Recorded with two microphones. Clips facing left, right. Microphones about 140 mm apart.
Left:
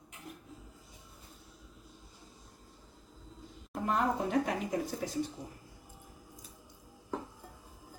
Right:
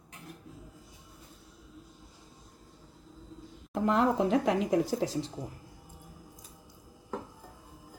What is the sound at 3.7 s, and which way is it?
Speech, 90° right.